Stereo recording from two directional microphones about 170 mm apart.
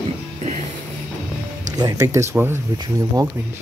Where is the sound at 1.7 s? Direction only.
20° right (ahead or behind).